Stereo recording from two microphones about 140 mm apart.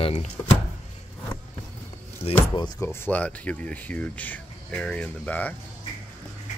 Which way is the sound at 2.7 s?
10° left (ahead or behind).